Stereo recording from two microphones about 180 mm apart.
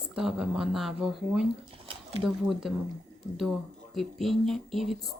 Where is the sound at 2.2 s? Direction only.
Centre (ahead or behind).